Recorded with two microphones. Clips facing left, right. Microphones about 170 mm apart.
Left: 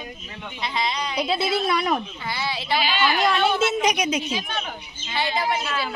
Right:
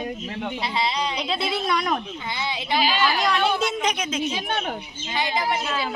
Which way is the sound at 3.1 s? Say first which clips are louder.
Left 1 dB; 5° left (ahead or behind).